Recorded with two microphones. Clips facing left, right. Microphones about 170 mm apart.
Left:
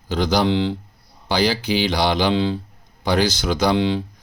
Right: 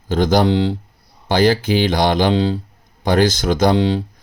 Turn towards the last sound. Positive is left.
turn(degrees=-40)  # may be behind; listen again after turning